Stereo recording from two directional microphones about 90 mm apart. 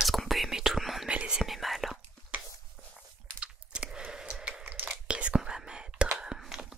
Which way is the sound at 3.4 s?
10° right (ahead or behind).